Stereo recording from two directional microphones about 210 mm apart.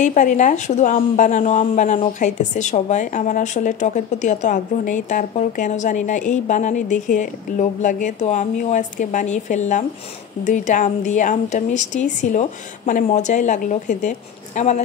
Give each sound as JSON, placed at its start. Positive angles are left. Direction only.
{"t": 0.0, "sound": "a woman's voice", "side_deg": 35}